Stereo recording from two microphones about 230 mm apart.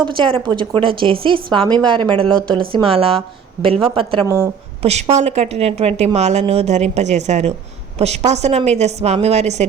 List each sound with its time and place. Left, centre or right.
0.0 s a woman's voice: right